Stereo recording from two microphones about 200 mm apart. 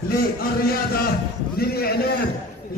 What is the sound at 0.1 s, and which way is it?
A man's voice, 50° left (ahead or behind).